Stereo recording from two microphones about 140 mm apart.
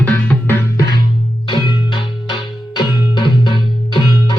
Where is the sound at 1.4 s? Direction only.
35° left (ahead or behind).